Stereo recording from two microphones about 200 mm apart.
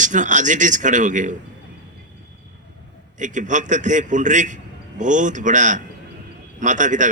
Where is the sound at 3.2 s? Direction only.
40° right (ahead or behind).